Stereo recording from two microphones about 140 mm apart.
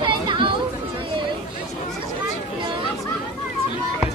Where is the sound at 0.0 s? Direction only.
35° right (ahead or behind).